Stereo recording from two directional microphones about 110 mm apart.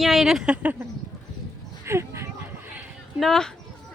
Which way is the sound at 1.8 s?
25° right (ahead or behind).